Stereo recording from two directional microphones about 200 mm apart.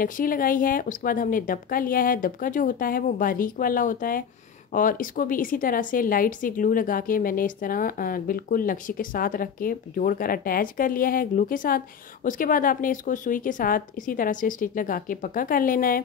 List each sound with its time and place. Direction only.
0.0 s speech: 45° left (ahead or behind)